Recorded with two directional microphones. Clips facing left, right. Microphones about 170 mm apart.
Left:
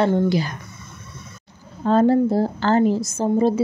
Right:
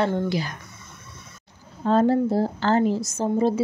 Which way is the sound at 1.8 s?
60° left (ahead or behind).